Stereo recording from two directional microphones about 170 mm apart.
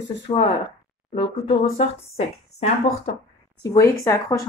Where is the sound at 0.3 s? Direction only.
30° left (ahead or behind).